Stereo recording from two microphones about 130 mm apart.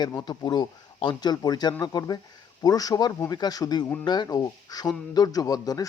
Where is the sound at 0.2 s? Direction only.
35° left (ahead or behind).